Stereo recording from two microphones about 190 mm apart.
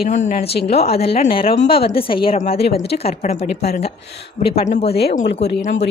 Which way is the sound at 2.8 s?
30° left (ahead or behind).